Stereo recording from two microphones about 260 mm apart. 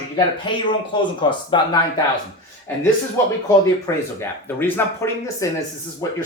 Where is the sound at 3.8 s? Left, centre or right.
Centre.